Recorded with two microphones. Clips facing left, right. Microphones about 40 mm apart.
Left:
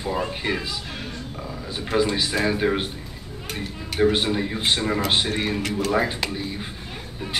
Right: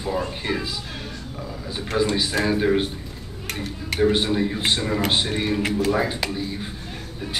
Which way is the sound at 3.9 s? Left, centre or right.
Centre.